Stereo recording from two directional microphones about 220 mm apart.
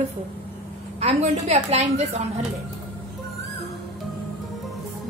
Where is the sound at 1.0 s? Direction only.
30° right (ahead or behind).